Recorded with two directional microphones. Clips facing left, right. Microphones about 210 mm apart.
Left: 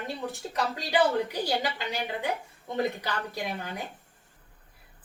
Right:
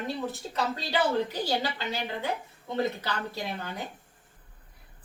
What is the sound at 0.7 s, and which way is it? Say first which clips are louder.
A woman's voice: left 3 dB; 15° left (ahead or behind).